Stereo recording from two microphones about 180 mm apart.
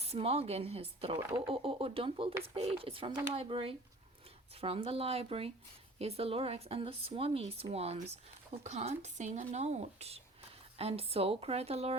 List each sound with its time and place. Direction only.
0.0 s speech: 35° right (ahead or behind)